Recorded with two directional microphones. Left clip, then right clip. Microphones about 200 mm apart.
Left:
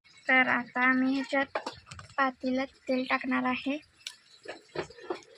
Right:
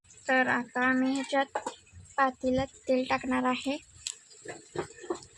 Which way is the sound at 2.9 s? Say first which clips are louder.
Even; 50° right (ahead or behind).